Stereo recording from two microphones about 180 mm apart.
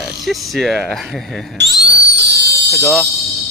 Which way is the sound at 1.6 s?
70° right (ahead or behind).